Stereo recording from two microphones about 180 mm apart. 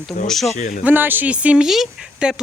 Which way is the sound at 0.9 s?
10° right (ahead or behind).